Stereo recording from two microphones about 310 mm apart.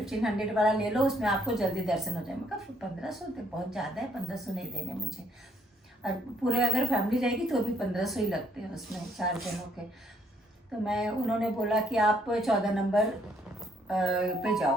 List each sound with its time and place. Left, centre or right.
0.0 s a woman's voice: centre
6.0 s a woman's voice: centre
10.8 s a woman's voice: centre